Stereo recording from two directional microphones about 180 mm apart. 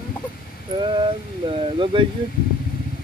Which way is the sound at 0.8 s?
25° right (ahead or behind).